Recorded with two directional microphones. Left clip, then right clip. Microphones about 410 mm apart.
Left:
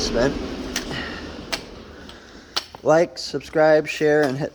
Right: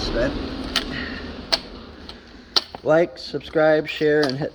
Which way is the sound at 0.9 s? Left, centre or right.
Centre.